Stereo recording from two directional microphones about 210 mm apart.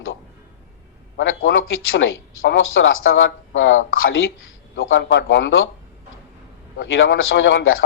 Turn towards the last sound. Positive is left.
turn(degrees=70)  # may be behind; listen again after turning